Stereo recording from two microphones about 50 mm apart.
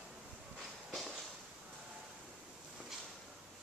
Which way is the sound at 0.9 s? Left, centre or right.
Centre.